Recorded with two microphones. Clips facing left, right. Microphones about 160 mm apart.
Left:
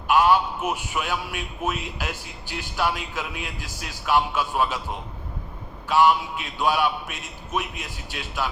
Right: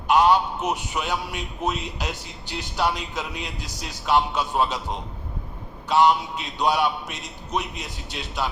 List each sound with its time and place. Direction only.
0.1 s a man's voice: 20° right (ahead or behind)